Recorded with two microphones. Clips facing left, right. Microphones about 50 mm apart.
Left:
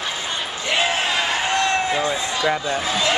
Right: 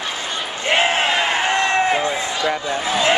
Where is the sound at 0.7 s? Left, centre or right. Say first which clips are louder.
Right 4 dB; right.